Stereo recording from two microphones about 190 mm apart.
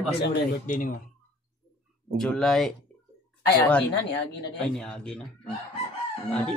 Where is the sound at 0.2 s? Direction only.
45° left (ahead or behind).